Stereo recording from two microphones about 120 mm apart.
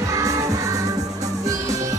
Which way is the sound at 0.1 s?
30° right (ahead or behind).